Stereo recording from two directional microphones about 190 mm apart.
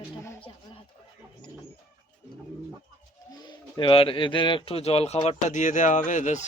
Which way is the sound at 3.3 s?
20° left (ahead or behind).